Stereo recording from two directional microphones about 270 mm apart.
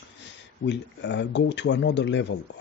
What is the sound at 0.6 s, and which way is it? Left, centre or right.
Speech, left.